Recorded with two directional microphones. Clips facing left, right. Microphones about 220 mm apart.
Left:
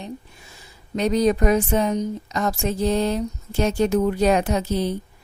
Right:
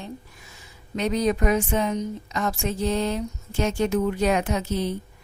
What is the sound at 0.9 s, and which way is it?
Speech, 35° left (ahead or behind).